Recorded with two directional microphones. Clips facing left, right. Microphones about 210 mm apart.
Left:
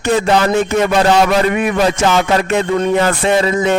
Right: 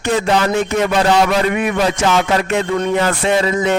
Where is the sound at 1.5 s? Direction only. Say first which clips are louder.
Left 2 dB; 45° left (ahead or behind).